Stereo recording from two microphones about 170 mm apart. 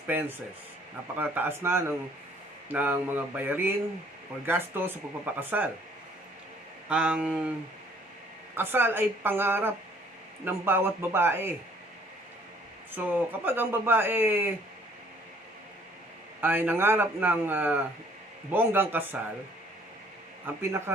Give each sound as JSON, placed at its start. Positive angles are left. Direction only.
{"t": 0.1, "sound": "speech", "side_deg": -10}
{"t": 6.8, "sound": "speech", "side_deg": -5}
{"t": 8.5, "sound": "speech", "side_deg": -10}
{"t": 13.0, "sound": "speech", "side_deg": -10}
{"t": 16.4, "sound": "speech", "side_deg": -10}
{"t": 20.6, "sound": "speech", "side_deg": -15}